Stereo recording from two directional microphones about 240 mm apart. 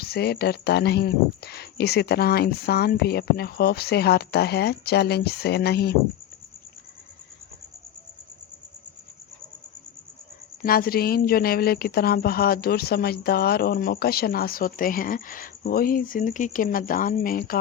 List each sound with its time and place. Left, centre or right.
0.0 s speech: left
10.6 s speech: left